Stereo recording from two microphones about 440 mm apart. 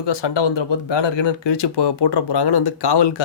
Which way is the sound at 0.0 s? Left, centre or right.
Left.